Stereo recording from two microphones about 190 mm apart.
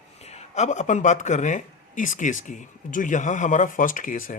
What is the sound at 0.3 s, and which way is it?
Speech, 35° left (ahead or behind).